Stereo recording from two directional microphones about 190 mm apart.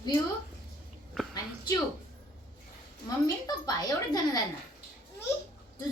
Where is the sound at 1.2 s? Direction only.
5° left (ahead or behind).